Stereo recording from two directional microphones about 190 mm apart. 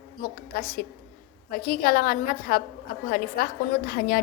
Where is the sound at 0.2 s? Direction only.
50° left (ahead or behind).